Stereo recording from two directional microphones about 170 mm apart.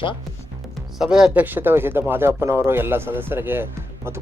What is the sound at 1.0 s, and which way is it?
Speech, 5° right (ahead or behind).